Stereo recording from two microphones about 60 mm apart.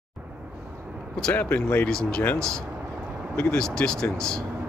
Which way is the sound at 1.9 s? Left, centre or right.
Centre.